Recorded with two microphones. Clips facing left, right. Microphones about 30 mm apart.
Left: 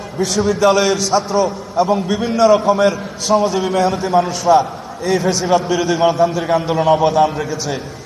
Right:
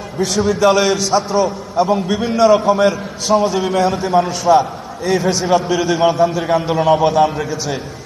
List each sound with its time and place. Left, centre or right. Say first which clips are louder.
0.2 s a man's voice: even; centre